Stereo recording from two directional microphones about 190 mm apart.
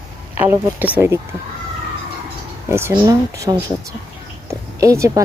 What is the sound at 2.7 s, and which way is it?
Speech, 15° right (ahead or behind).